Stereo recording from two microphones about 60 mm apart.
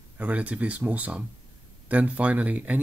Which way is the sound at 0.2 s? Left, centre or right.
Right.